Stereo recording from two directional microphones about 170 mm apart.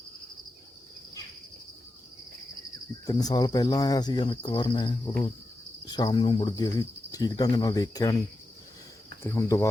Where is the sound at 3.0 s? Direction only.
25° left (ahead or behind).